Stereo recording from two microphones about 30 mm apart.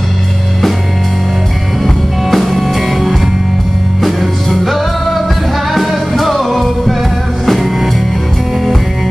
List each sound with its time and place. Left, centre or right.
2.3 s music: centre